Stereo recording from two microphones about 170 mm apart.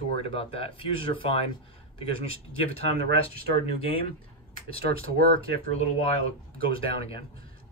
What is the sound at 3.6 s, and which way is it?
Speech, 35° left (ahead or behind).